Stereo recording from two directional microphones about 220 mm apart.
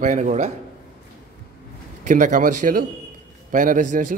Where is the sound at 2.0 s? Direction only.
35° right (ahead or behind).